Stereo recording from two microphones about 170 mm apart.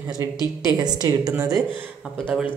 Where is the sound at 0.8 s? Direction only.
25° right (ahead or behind).